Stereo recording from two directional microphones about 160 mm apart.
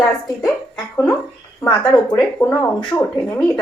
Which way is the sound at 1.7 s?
30° left (ahead or behind).